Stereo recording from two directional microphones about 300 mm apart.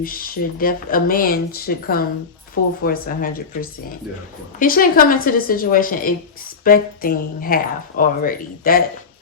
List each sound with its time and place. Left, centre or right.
0.0 s speech: left